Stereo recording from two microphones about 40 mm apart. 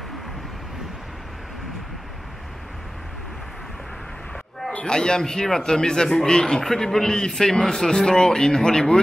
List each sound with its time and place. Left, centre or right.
4.8 s speech: left